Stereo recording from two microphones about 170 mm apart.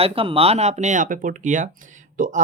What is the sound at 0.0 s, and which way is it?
Speech, 35° right (ahead or behind).